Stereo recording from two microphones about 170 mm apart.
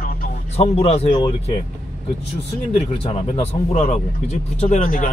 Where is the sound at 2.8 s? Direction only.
35° left (ahead or behind).